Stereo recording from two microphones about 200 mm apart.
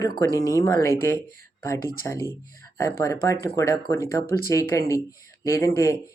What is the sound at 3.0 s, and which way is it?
Speech, 15° left (ahead or behind).